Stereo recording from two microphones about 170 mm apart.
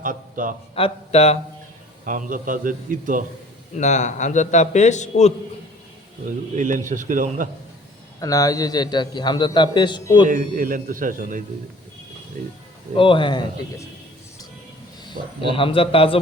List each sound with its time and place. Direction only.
0.0 s a man's voice: 55° right (ahead or behind)
0.8 s a man's voice: 35° left (ahead or behind)
2.0 s a man's voice: 50° right (ahead or behind)
3.8 s a man's voice: 45° left (ahead or behind)
6.2 s a man's voice: 50° right (ahead or behind)
8.2 s a man's voice: 20° left (ahead or behind)
10.2 s a man's voice: 50° right (ahead or behind)
13.0 s a man's voice: 30° left (ahead or behind)
15.4 s a man's voice: 30° left (ahead or behind)